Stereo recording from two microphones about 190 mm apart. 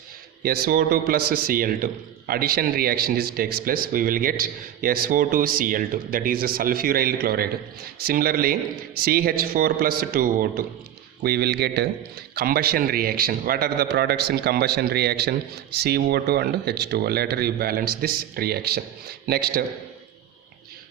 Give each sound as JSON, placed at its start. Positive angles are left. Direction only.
{"t": 0.4, "sound": "a man's voice", "side_deg": -50}